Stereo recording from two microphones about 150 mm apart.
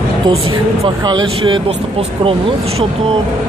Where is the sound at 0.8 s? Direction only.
30° right (ahead or behind).